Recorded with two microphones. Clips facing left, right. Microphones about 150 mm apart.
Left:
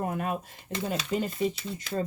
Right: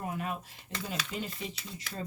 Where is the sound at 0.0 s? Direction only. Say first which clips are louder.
Left 6 dB; 50° left (ahead or behind).